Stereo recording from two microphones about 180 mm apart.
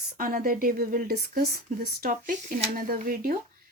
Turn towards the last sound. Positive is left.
turn(degrees=-50)  # may be behind; listen again after turning